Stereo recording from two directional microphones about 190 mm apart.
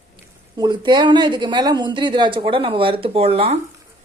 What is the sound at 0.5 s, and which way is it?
Speech, 20° right (ahead or behind).